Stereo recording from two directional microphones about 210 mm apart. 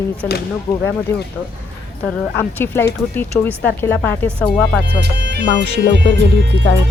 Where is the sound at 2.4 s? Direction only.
10° left (ahead or behind).